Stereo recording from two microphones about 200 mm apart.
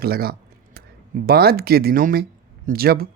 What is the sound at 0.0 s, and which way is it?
Speech, 50° right (ahead or behind).